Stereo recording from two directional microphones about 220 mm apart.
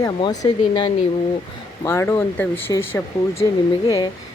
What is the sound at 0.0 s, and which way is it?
Speech, 20° left (ahead or behind).